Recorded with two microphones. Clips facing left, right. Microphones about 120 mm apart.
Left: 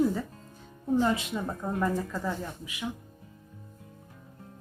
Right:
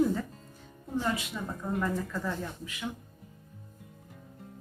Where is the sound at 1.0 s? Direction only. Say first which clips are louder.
Left 5 dB; 30° left (ahead or behind).